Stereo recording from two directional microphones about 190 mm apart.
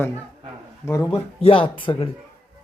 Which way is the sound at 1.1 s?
30° left (ahead or behind).